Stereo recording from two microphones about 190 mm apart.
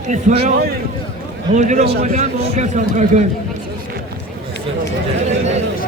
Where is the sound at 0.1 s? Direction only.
40° right (ahead or behind).